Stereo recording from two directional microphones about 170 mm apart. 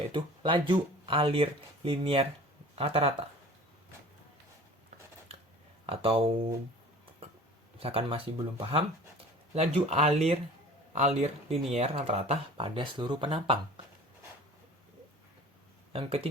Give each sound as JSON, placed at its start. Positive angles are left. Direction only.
{"t": 0.1, "sound": "speech", "side_deg": -30}
{"t": 5.8, "sound": "speech", "side_deg": -35}
{"t": 7.8, "sound": "speech", "side_deg": -35}
{"t": 15.9, "sound": "speech", "side_deg": -35}